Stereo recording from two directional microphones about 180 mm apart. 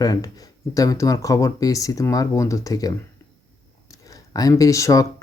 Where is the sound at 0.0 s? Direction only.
20° left (ahead or behind).